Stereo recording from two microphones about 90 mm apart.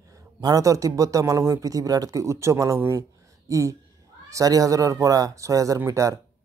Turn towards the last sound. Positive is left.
turn(degrees=-35)  # may be behind; listen again after turning